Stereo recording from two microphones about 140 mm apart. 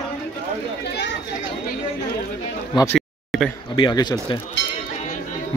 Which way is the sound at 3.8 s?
30° left (ahead or behind).